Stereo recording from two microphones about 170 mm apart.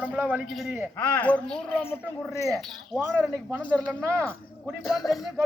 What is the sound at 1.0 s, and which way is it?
A woman's voice, 10° left (ahead or behind).